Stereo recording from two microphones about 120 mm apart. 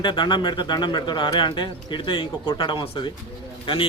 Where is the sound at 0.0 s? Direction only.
40° left (ahead or behind).